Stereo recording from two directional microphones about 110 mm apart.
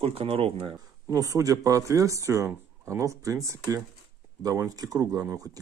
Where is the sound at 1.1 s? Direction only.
30° right (ahead or behind).